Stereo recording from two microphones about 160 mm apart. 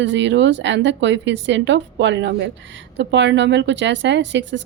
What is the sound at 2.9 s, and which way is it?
A woman's voice, 90° right.